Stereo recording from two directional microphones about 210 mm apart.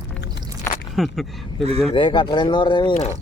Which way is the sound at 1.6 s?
30° right (ahead or behind).